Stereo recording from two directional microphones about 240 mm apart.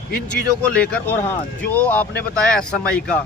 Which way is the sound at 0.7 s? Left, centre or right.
Centre.